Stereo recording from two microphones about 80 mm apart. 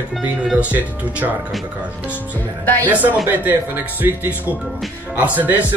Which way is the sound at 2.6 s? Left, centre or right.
Left.